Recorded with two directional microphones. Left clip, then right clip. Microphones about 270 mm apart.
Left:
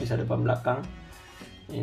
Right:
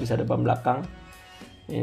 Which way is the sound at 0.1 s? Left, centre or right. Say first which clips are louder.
Right 4 dB; right.